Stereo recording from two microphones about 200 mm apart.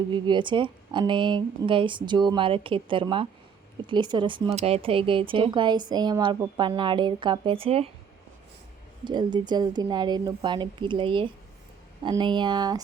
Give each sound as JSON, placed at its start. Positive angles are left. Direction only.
{"t": 0.1, "sound": "speech", "side_deg": -25}
{"t": 9.0, "sound": "speech", "side_deg": -20}